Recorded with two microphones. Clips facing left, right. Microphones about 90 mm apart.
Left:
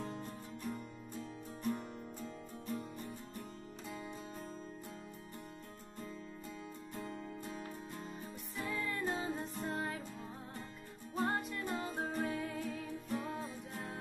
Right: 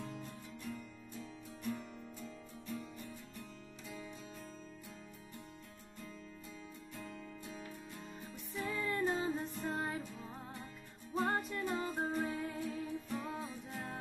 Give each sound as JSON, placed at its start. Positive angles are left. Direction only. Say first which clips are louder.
{"t": 0.0, "sound": "music", "louder": "left 3 dB", "side_deg": 45}
{"t": 7.0, "sound": "music", "louder": "left 4 dB", "side_deg": 40}
{"t": 8.6, "sound": "music", "louder": "right 2 dB", "side_deg": 0}
{"t": 11.1, "sound": "music", "louder": "right 1 dB", "side_deg": 0}